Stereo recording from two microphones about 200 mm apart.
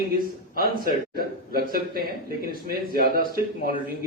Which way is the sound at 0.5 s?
50° right (ahead or behind).